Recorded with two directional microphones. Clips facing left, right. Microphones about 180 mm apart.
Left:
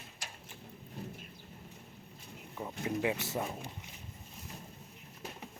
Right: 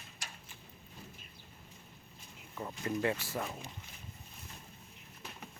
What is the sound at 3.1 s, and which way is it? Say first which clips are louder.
Speech: left 3 dB; 20° left (ahead or behind).